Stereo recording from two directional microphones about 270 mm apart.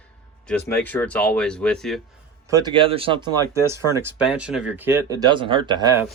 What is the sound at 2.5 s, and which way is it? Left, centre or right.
Speech, centre.